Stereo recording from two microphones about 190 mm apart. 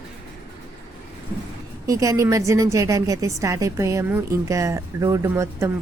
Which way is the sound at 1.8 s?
20° right (ahead or behind).